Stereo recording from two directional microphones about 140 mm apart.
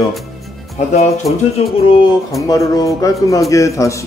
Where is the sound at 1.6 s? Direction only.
45° left (ahead or behind).